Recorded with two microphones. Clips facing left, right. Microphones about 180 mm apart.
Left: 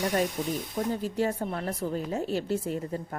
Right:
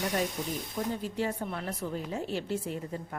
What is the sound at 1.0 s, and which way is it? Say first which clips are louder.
A woman's voice: left 4 dB; 40° left (ahead or behind).